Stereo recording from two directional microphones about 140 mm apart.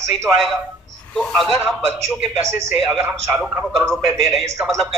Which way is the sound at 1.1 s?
5° left (ahead or behind).